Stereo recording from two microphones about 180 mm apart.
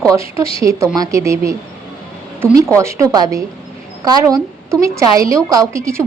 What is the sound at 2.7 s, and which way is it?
A woman's voice, 15° right (ahead or behind).